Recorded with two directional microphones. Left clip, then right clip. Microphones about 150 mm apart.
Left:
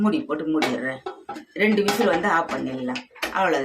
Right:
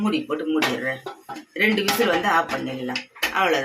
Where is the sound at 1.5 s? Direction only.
20° left (ahead or behind).